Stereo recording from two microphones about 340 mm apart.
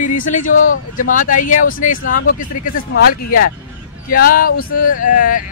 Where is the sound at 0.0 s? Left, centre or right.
Left.